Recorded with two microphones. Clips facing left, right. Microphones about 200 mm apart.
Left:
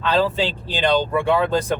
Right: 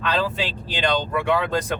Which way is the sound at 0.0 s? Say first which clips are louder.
Left 5 dB; 30° left (ahead or behind).